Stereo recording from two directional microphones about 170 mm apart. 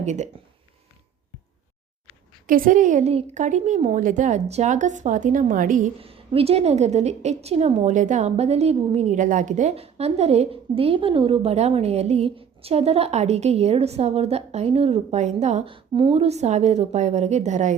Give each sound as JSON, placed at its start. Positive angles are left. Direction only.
{"t": 0.0, "sound": "speech", "side_deg": -45}
{"t": 2.5, "sound": "a woman's voice", "side_deg": -55}
{"t": 6.0, "sound": "a woman's voice", "side_deg": -35}